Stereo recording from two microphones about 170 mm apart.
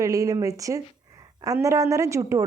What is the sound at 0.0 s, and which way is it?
A woman's voice, 20° right (ahead or behind).